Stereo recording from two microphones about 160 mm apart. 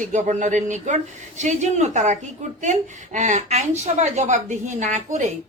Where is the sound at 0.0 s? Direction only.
50° right (ahead or behind).